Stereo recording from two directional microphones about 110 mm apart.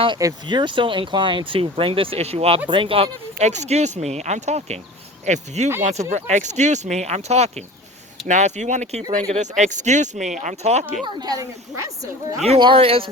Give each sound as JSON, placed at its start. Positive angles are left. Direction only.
{"t": 0.4, "sound": "speech", "side_deg": -45}
{"t": 2.6, "sound": "speech", "side_deg": -50}
{"t": 11.0, "sound": "speech", "side_deg": -35}
{"t": 12.5, "sound": "speech", "side_deg": -50}